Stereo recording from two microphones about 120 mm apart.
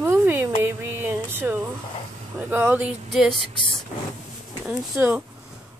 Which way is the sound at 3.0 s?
Centre (ahead or behind).